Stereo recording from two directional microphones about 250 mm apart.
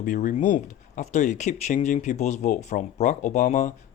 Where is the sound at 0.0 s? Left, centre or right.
Left.